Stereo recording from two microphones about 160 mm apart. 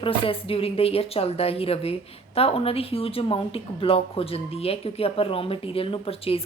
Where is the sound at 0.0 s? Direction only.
35° left (ahead or behind).